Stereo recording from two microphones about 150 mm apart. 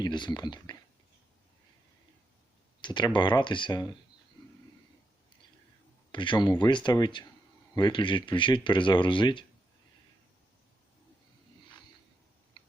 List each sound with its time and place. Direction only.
0.0 s speech: 30° left (ahead or behind)
2.8 s speech: 30° left (ahead or behind)
6.1 s speech: 30° left (ahead or behind)